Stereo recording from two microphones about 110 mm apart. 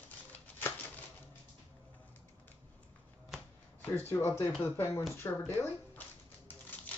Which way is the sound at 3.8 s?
20° left (ahead or behind).